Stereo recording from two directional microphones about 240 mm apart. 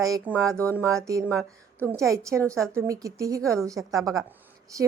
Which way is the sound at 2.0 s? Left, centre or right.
Centre.